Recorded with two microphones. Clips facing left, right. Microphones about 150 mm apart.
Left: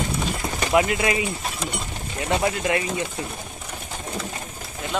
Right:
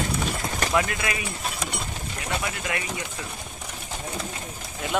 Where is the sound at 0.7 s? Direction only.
20° left (ahead or behind).